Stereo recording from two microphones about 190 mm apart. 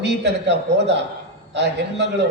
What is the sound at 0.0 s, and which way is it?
A man's voice, 65° right (ahead or behind).